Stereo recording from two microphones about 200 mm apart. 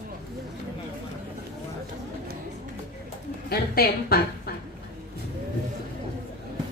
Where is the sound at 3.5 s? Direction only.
50° left (ahead or behind).